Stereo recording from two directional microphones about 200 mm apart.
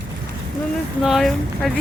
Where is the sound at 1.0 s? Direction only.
Centre (ahead or behind).